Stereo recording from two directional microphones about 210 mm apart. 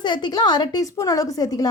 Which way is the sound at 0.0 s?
20° left (ahead or behind).